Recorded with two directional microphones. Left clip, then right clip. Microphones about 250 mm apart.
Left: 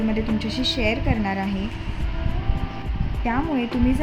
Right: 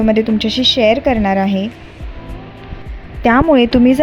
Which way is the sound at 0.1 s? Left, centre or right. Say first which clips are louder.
Right 12 dB; right.